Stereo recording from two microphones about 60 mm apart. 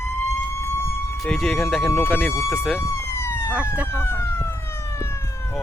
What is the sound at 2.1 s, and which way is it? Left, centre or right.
Speech, left.